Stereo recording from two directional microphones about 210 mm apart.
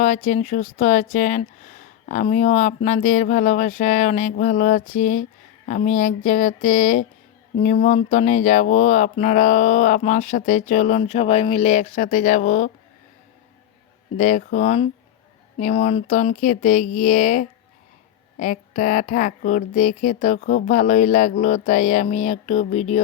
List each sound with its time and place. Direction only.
0.0 s speech: 35° left (ahead or behind)
14.2 s speech: 35° left (ahead or behind)